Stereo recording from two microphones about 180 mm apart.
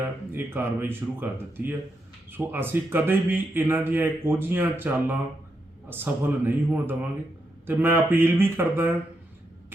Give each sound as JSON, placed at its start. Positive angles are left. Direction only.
{"t": 0.0, "sound": "a man's voice", "side_deg": -10}